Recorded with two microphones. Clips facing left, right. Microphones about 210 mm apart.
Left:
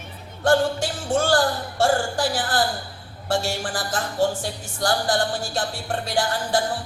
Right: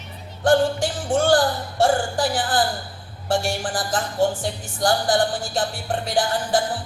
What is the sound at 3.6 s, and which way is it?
Music, 20° right (ahead or behind).